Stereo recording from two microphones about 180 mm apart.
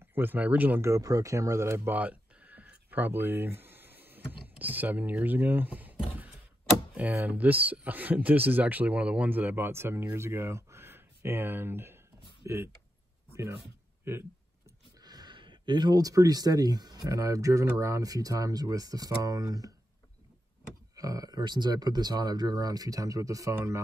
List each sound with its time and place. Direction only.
0.0 s a man's voice: 10° right (ahead or behind)
20.9 s speech: 20° right (ahead or behind)